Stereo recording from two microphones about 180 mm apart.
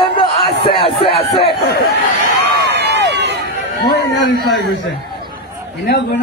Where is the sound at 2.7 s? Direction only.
70° right (ahead or behind).